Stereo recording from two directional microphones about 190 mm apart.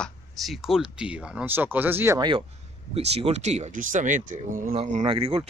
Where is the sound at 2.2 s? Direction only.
25° right (ahead or behind); by 5.0 s 40° right (ahead or behind).